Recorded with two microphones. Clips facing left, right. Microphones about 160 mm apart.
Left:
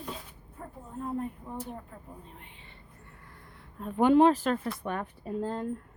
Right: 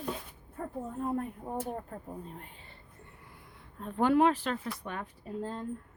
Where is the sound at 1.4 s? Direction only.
50° right (ahead or behind).